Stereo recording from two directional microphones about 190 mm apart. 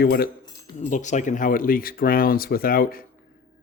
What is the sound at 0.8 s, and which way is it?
Speech, 40° left (ahead or behind).